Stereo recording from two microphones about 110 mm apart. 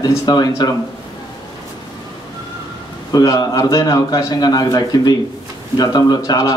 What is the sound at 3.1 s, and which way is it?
A man's voice, 35° left (ahead or behind).